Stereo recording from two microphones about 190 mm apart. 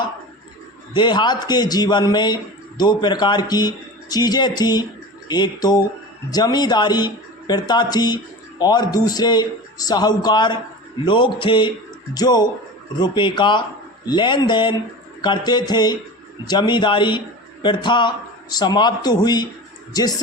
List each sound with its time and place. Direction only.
0.9 s speech: 25° left (ahead or behind)